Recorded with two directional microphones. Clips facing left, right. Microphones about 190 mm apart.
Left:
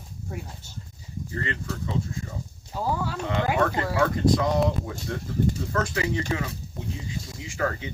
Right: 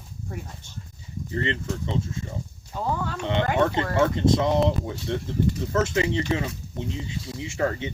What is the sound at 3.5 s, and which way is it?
Speech, 25° right (ahead or behind).